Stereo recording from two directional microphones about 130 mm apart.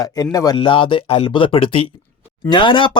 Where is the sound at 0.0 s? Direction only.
30° left (ahead or behind).